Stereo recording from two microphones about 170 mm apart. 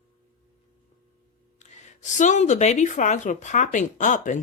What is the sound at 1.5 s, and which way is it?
Speech, 45° left (ahead or behind).